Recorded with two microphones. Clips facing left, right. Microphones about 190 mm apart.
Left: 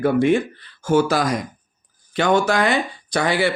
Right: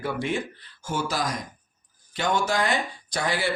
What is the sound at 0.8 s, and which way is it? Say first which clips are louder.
Speech: left 10 dB; 65° left (ahead or behind).